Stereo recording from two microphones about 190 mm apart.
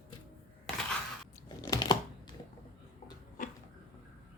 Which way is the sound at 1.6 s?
20° left (ahead or behind).